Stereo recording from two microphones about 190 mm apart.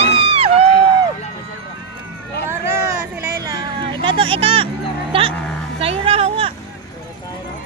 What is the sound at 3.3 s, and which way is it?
Music, 15° right (ahead or behind).